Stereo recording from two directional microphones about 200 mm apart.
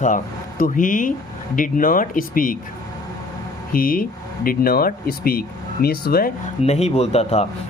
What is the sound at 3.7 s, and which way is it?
Speech, 45° left (ahead or behind).